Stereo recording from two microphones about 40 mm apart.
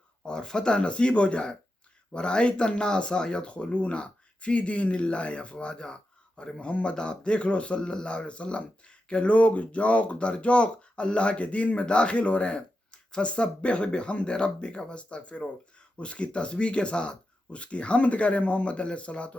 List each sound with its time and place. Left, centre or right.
0.3 s speech: centre